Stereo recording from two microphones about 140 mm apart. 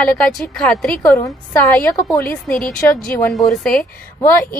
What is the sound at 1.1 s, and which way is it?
Speech, 15° left (ahead or behind).